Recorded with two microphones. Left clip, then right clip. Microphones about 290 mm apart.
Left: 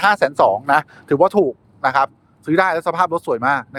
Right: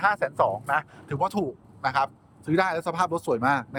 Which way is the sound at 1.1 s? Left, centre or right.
Centre.